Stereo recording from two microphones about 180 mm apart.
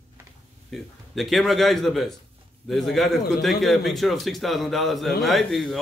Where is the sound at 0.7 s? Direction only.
Centre (ahead or behind).